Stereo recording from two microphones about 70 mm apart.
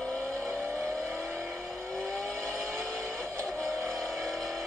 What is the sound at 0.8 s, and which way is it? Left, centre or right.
Vehicle, right.